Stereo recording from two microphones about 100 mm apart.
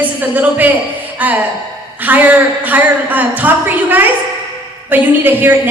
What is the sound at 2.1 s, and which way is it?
A woman's voice, 15° right (ahead or behind).